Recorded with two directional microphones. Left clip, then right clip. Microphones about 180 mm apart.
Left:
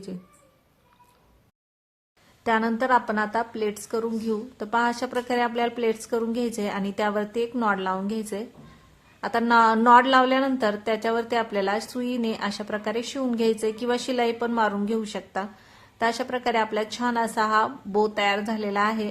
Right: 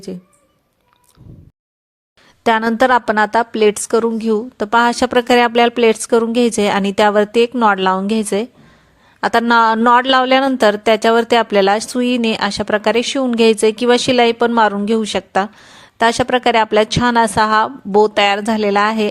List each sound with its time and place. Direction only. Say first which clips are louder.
2.4 s speech: right 11 dB; 45° right (ahead or behind)